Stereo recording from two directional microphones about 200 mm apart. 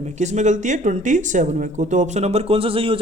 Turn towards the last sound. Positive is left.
turn(degrees=-25)  # may be behind; listen again after turning